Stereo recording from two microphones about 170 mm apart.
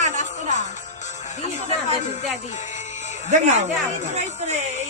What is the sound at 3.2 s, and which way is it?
Speech, 45° right (ahead or behind).